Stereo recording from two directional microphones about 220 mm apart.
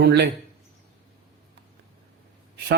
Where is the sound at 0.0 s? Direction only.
50° right (ahead or behind).